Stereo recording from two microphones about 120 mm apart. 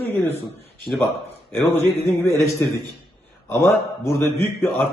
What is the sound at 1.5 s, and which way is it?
Speech, 15° left (ahead or behind).